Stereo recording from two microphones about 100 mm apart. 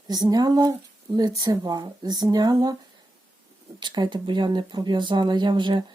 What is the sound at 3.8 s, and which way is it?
Speech, 50° right (ahead or behind).